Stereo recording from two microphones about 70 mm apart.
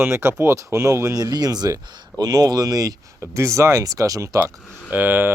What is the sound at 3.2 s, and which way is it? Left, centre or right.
Speech, right.